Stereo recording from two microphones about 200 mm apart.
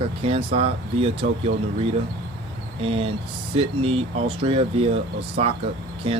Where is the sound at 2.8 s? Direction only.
30° right (ahead or behind).